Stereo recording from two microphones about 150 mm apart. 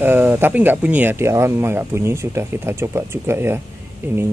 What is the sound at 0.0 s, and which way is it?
Speech, 10° right (ahead or behind).